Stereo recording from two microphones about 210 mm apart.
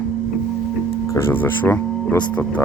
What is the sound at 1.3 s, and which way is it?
Speech, 10° left (ahead or behind).